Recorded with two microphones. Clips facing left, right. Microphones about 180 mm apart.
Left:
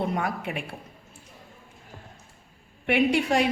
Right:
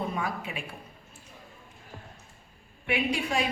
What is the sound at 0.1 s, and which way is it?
Speech, 65° left (ahead or behind).